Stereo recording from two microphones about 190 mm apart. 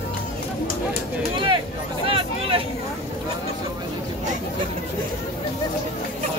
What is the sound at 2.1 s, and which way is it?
Vehicle, 30° right (ahead or behind).